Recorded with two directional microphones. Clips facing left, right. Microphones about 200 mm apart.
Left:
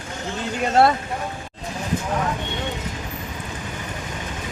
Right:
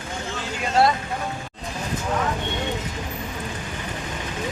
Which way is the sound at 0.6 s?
55° left (ahead or behind).